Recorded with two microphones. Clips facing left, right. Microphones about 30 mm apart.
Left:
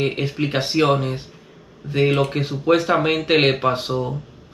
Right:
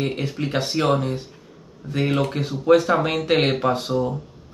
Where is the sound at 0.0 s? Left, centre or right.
Left.